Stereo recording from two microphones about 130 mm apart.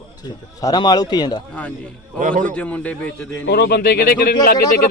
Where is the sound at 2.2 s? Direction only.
90° right.